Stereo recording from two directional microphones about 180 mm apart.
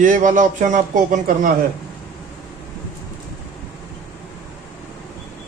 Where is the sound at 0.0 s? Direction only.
45° right (ahead or behind).